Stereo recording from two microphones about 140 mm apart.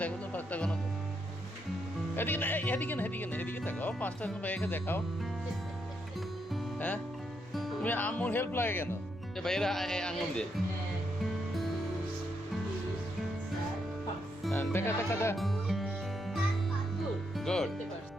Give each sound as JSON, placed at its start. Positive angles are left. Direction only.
{"t": 0.0, "sound": "music", "side_deg": 10}
{"t": 2.1, "sound": "speech", "side_deg": 15}
{"t": 6.7, "sound": "speech", "side_deg": 10}
{"t": 7.5, "sound": "music", "side_deg": 0}
{"t": 7.9, "sound": "speech", "side_deg": 10}
{"t": 14.5, "sound": "speech", "side_deg": 15}
{"t": 15.4, "sound": "music", "side_deg": 0}
{"t": 17.3, "sound": "music", "side_deg": 5}